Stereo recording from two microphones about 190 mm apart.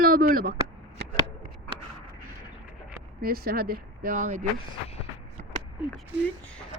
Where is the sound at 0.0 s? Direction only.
50° right (ahead or behind).